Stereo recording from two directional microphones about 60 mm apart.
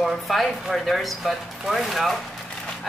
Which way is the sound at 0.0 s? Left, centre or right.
Centre.